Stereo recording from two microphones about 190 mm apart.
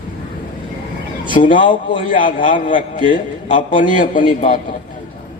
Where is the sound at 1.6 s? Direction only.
25° left (ahead or behind).